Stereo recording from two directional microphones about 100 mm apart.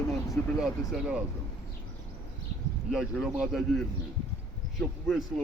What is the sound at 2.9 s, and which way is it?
A man's voice, 5° right (ahead or behind).